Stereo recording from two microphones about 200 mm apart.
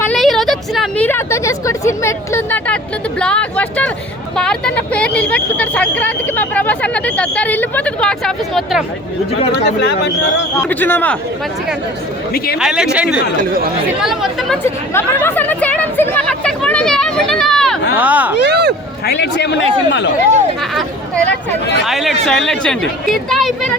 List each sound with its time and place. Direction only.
0.0 s a sound: 5° left (ahead or behind)
3.2 s speech: 5° left (ahead or behind)
9.6 s speech: 55° left (ahead or behind)
10.7 s speech: 10° left (ahead or behind)
12.5 s a woman's voice: 5° right (ahead or behind)
14.6 s chatter: 10° left (ahead or behind)
17.9 s speech: 10° right (ahead or behind)
18.4 s speech: 55° right (ahead or behind)
19.0 s speech: 55° left (ahead or behind)
21.2 s speech: 60° left (ahead or behind)
21.8 s a woman's voice: centre (ahead or behind)